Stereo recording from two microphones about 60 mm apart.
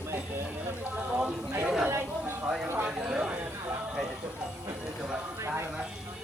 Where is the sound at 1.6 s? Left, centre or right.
Centre.